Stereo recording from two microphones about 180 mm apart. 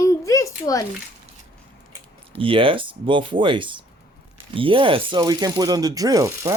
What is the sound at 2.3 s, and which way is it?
Speech, 30° right (ahead or behind).